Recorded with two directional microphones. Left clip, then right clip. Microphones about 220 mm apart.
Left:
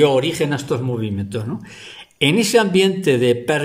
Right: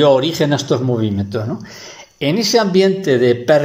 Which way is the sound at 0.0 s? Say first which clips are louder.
Right 3 dB; 10° left (ahead or behind).